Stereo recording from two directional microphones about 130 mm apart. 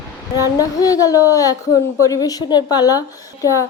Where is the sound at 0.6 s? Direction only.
25° left (ahead or behind).